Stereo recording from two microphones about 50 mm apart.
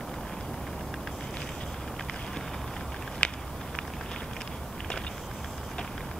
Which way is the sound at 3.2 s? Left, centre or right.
Left.